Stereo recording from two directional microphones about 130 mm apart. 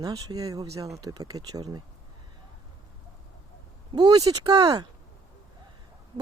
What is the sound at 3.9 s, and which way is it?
Speech, 30° right (ahead or behind).